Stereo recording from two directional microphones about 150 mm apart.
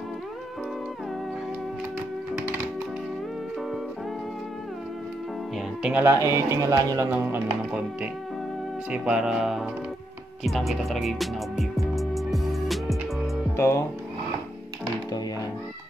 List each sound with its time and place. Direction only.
5.8 s speech: 5° right (ahead or behind)
6.0 s a man's voice: 20° right (ahead or behind)
7.1 s speech: 10° right (ahead or behind)
8.9 s music: 5° right (ahead or behind)
13.6 s speech: 20° left (ahead or behind)